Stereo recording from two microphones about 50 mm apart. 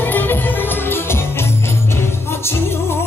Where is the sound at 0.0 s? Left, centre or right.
Left.